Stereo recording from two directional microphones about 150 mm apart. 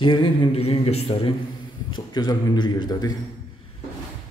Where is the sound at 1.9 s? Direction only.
25° left (ahead or behind).